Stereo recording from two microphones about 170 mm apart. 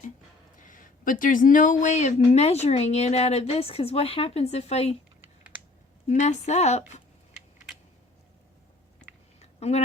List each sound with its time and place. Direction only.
0.7 s speech: 50° left (ahead or behind)
6.1 s speech: 40° left (ahead or behind)
9.4 s a sound: 40° left (ahead or behind)